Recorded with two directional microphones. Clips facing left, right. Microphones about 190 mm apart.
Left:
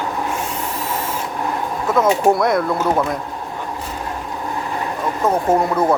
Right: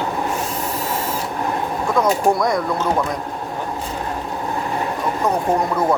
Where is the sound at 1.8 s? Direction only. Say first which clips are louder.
Left 2 dB; 5° left (ahead or behind).